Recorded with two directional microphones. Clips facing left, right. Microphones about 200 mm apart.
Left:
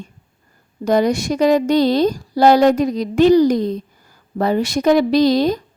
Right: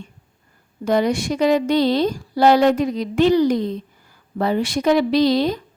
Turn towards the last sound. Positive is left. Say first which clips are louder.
# left 3 dB
turn(degrees=40)  # may be behind; listen again after turning